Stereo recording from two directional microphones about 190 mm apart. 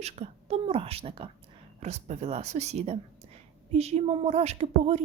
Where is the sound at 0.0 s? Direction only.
35° right (ahead or behind).